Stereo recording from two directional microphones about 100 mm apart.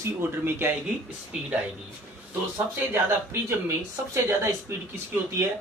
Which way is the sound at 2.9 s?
25° right (ahead or behind).